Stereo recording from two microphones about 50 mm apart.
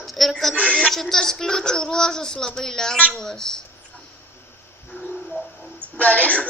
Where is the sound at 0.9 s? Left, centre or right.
Centre.